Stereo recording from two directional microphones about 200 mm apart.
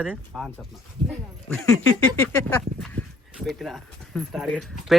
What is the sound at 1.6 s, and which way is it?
Speech, 15° left (ahead or behind).